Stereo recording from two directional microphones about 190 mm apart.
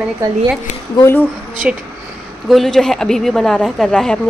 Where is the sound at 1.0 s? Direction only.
10° left (ahead or behind).